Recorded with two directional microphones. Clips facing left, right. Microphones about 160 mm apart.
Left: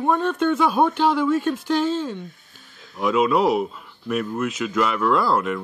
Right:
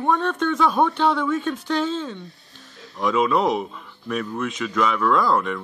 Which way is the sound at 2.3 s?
40° right (ahead or behind).